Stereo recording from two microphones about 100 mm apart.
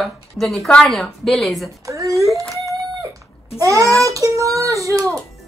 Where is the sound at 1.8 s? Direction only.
35° right (ahead or behind).